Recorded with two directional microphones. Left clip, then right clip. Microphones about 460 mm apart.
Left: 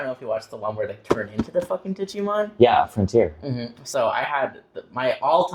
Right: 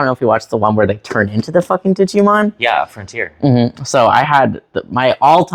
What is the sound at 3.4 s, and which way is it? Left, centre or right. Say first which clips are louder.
Speech: right 17 dB; right.